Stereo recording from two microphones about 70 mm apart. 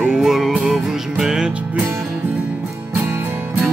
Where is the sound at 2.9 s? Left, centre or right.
Right.